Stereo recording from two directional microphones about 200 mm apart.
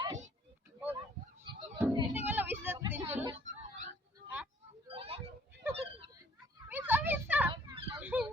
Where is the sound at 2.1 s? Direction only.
10° right (ahead or behind).